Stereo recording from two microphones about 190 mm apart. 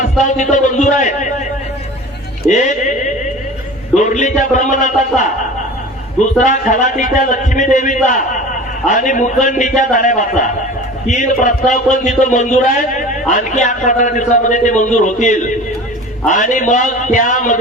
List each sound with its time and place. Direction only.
0.3 s a man's voice: 40° left (ahead or behind)
2.5 s a man's voice: 40° left (ahead or behind)
3.9 s a man's voice: 40° left (ahead or behind)
6.4 s a man's voice: 40° left (ahead or behind)